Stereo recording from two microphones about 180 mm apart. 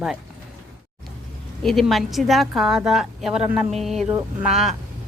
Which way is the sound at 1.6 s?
Centre (ahead or behind).